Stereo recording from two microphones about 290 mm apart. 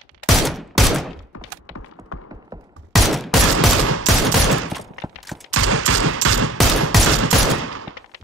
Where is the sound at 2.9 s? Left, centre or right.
Centre.